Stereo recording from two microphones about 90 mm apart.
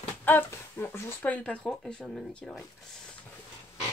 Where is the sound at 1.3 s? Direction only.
10° left (ahead or behind).